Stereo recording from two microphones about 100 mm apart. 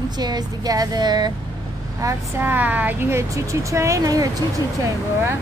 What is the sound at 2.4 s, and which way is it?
Speech, 20° right (ahead or behind).